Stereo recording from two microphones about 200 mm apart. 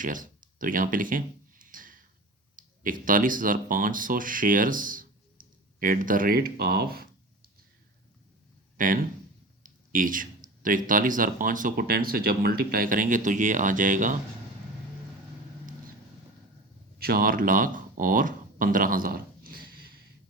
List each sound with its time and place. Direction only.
0.0 s a sound: 40° right (ahead or behind)
2.6 s speech: 40° right (ahead or behind)
8.8 s speech: 40° right (ahead or behind)
17.0 s speech: 50° right (ahead or behind)